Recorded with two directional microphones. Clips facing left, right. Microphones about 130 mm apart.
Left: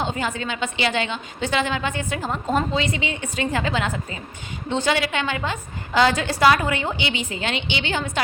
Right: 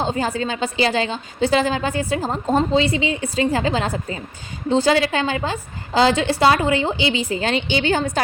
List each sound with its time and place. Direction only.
0.0 s a woman's voice: 35° right (ahead or behind)